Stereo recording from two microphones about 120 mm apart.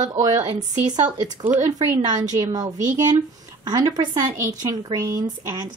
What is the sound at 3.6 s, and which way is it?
Speech, 30° right (ahead or behind).